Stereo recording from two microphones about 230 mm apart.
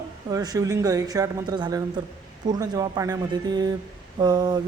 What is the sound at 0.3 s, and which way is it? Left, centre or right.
Speech, centre.